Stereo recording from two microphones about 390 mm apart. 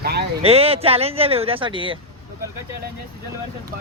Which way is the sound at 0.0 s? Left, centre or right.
Right.